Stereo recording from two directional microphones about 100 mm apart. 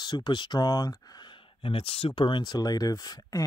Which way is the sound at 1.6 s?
65° left (ahead or behind).